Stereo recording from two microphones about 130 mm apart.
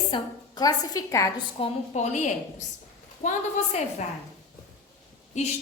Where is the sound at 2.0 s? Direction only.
65° left (ahead or behind).